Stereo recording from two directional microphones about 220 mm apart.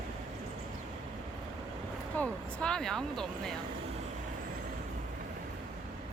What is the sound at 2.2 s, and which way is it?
Speech, 5° left (ahead or behind).